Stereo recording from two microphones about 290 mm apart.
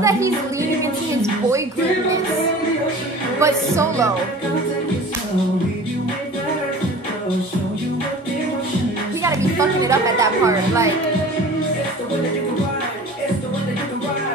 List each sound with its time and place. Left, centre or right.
0.0 s speech: centre
3.3 s speech: centre
9.2 s a woman's voice: centre